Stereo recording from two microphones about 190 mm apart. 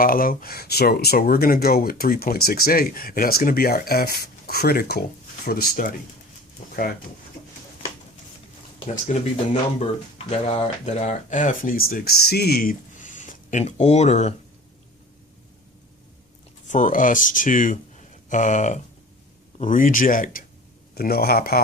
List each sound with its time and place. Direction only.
0.0 s speech: 50° left (ahead or behind)
9.0 s speech: 40° left (ahead or behind)
16.6 s speech: 40° left (ahead or behind)